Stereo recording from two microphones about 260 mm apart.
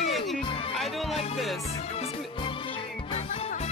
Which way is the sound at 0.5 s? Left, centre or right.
Left.